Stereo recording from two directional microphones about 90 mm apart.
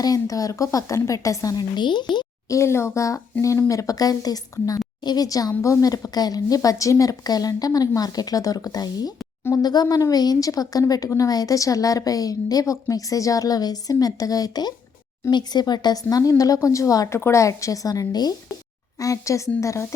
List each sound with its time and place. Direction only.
0.0 s a woman's voice: 40° left (ahead or behind)
1.7 s speech: 55° left (ahead or behind)
2.5 s a woman's voice: 30° left (ahead or behind)